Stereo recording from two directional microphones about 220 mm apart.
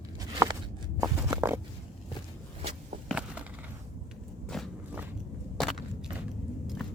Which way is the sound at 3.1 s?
5° right (ahead or behind).